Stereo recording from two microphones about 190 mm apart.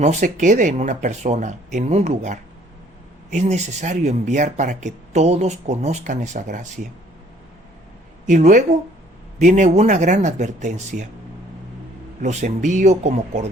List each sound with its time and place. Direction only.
0.0 s speech: 40° right (ahead or behind)
8.3 s speech: 40° right (ahead or behind)
12.2 s speech: 40° right (ahead or behind)